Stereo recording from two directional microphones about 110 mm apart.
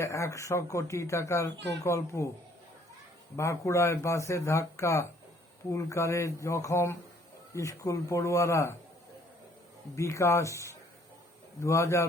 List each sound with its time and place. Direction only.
0.0 s speech: 25° left (ahead or behind)
3.3 s speech: 25° left (ahead or behind)
9.9 s speech: 25° left (ahead or behind)